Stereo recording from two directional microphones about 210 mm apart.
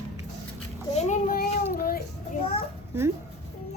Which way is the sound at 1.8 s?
45° left (ahead or behind).